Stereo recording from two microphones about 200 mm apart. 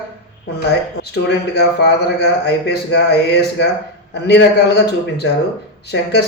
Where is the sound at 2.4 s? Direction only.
55° left (ahead or behind).